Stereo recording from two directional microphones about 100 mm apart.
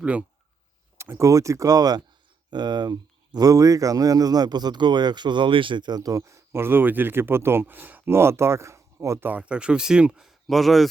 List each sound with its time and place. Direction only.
0.0 s speech: 15° right (ahead or behind)
0.9 s speech: 25° right (ahead or behind)
9.3 s speech: 10° right (ahead or behind)